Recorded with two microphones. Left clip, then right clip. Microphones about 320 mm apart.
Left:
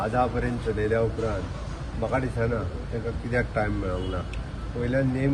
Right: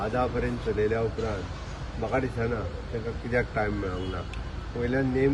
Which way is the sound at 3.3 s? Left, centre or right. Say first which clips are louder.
Even; centre.